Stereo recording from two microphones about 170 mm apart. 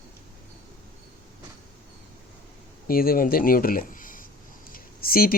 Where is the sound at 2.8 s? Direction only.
60° left (ahead or behind).